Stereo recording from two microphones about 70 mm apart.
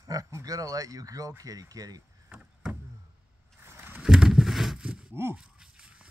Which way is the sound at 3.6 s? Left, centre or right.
Right.